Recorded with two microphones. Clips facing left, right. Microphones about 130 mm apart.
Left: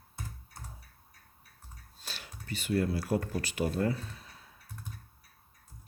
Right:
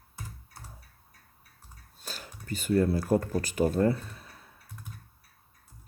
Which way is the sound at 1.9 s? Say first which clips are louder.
Right 4 dB; 45° right (ahead or behind).